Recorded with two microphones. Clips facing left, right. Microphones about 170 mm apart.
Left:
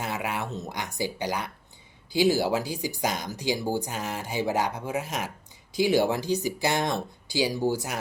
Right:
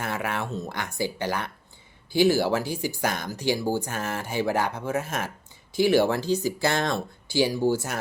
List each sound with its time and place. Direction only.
0.0 s speech: 15° left (ahead or behind)